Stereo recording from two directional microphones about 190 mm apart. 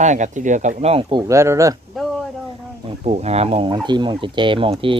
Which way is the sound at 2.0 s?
Centre (ahead or behind).